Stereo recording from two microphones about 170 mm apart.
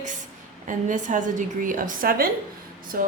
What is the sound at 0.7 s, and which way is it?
A woman's voice, 50° right (ahead or behind).